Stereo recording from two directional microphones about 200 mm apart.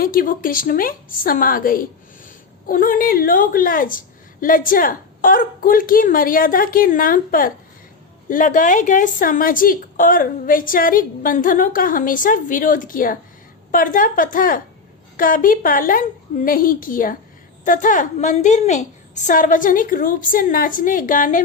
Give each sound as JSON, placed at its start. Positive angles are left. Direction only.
{"t": 0.0, "sound": "a woman's voice", "side_deg": 45}